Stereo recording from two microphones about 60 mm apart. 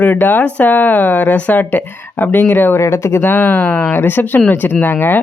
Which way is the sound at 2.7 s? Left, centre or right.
Left.